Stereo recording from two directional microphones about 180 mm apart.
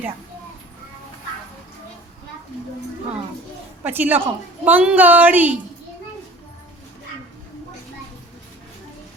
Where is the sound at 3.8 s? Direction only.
10° right (ahead or behind).